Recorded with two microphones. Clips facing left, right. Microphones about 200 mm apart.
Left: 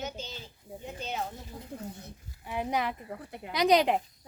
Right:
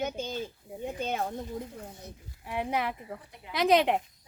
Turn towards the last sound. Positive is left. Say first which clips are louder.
# even
turn(degrees=0)  # may be behind; listen again after turning